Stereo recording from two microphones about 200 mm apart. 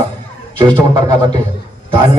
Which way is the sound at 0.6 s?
25° right (ahead or behind).